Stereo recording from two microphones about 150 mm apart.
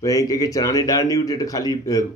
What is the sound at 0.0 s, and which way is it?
A man's voice, 25° left (ahead or behind).